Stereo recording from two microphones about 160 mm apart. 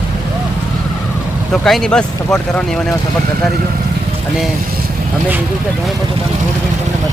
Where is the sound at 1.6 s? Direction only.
5° left (ahead or behind).